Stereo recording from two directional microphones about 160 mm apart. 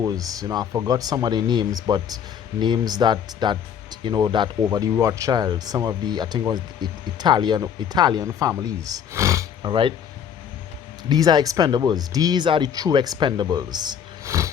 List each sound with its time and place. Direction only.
0.0 s speech: 20° right (ahead or behind)
11.1 s speech: 25° right (ahead or behind)